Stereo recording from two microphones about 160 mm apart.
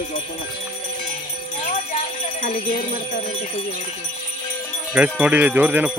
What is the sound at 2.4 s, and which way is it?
Speech, 60° left (ahead or behind).